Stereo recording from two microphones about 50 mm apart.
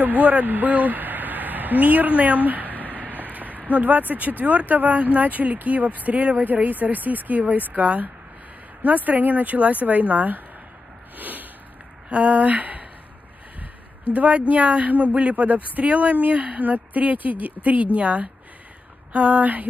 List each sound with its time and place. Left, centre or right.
0.2 s a sound: right
4.1 s speech: right
14.1 s speech: right